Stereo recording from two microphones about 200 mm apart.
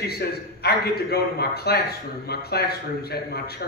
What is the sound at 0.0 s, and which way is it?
A man's voice, 55° left (ahead or behind).